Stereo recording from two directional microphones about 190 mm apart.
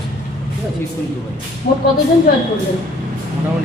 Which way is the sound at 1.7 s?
50° left (ahead or behind).